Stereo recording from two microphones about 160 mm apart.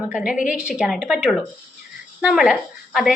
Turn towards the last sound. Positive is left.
turn(degrees=0)  # may be behind; listen again after turning